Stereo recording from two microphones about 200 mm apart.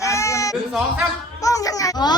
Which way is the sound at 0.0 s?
15° left (ahead or behind).